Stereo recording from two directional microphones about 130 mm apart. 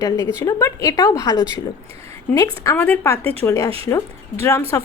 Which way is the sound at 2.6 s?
20° left (ahead or behind).